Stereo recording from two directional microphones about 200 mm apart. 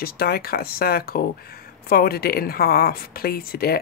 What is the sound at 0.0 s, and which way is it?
Speech, 50° left (ahead or behind).